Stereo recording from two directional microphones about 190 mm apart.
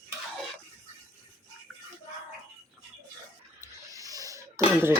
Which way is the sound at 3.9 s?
20° right (ahead or behind).